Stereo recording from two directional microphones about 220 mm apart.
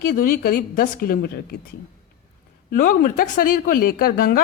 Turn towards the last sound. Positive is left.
turn(degrees=40)  # may be behind; listen again after turning